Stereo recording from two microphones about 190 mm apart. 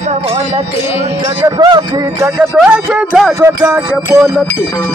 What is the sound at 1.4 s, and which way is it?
Speech, 20° right (ahead or behind).